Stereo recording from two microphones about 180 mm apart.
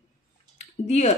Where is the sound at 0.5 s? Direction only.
40° left (ahead or behind).